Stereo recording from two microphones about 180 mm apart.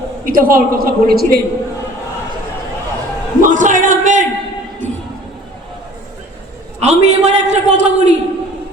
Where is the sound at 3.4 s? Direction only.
45° right (ahead or behind).